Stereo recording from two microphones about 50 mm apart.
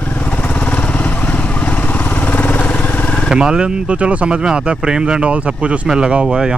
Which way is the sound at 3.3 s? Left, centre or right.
Centre.